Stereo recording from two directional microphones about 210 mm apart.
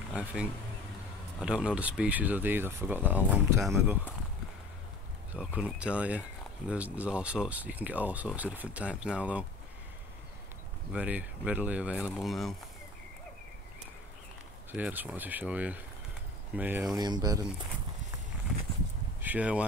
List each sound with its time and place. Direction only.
0.1 s speech: 5° right (ahead or behind)
5.3 s speech: 5° right (ahead or behind)
10.9 s speech: 5° right (ahead or behind)
14.7 s speech: 10° right (ahead or behind)
19.2 s speech: 5° right (ahead or behind)